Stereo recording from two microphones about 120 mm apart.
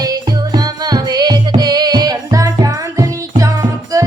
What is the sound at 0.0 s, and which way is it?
Music, 35° right (ahead or behind).